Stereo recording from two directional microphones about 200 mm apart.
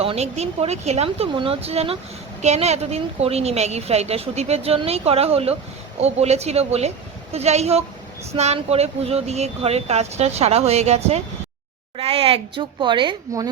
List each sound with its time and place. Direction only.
0.0 s a woman's voice: 30° right (ahead or behind)